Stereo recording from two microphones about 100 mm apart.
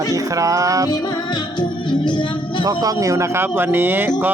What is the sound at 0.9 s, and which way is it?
Music, 45° left (ahead or behind).